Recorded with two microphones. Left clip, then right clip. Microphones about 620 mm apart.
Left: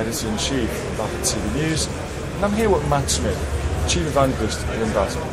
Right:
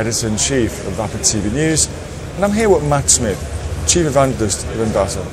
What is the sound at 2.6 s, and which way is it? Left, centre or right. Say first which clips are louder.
Speech: right 5 dB; right.